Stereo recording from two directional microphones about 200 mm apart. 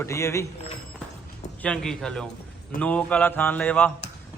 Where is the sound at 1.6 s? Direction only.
5° left (ahead or behind).